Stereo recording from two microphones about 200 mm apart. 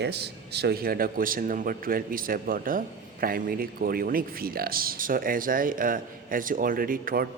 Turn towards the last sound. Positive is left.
turn(degrees=-45)  # may be behind; listen again after turning